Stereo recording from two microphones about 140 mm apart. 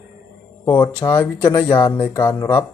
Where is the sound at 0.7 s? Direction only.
35° left (ahead or behind).